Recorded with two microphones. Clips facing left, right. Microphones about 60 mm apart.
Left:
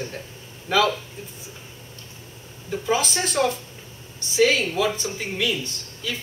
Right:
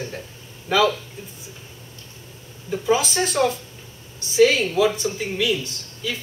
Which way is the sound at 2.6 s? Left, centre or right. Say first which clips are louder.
Right 3 dB; centre.